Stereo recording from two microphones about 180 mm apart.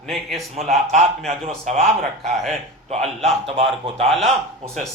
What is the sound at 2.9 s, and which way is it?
A man's voice, 35° right (ahead or behind).